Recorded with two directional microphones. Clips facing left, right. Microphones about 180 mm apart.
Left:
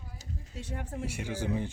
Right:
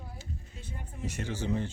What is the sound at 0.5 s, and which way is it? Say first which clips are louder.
Speech: left 7 dB; 80° left.